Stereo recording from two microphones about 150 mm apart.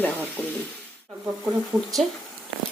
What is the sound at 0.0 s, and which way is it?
Speech, 10° left (ahead or behind).